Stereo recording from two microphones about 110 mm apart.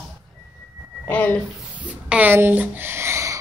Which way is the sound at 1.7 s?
15° right (ahead or behind).